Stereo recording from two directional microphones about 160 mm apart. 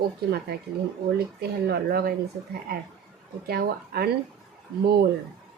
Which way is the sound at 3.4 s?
75° right (ahead or behind).